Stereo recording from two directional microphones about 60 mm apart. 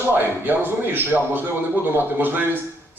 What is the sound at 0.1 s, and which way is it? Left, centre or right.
Speech, right.